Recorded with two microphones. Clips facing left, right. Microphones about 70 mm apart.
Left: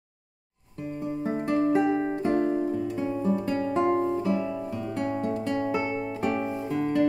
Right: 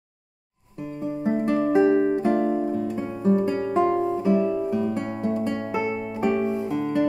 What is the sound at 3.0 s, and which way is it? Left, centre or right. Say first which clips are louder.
Guitar: right 7 dB; right.